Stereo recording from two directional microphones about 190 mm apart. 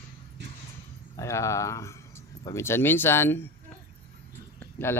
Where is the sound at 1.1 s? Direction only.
15° left (ahead or behind).